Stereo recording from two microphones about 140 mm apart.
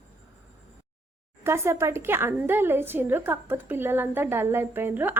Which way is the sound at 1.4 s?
20° right (ahead or behind).